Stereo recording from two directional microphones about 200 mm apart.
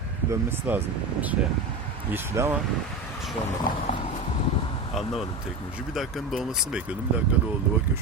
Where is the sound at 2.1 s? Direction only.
10° right (ahead or behind).